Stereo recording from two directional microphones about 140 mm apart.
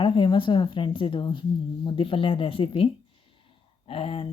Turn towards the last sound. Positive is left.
turn(degrees=40)  # may be behind; listen again after turning